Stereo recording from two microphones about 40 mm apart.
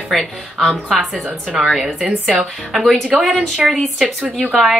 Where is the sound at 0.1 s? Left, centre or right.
Centre.